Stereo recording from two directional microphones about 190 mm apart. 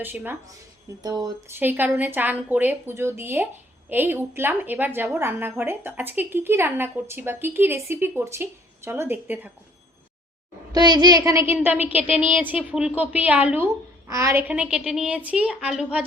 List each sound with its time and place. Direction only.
0.0 s a woman's voice: 10° right (ahead or behind)
1.0 s speech: 20° right (ahead or behind)
1.5 s a woman's voice: 10° right (ahead or behind)
10.7 s a woman's voice: 20° right (ahead or behind); by 16.0 s 5° right (ahead or behind)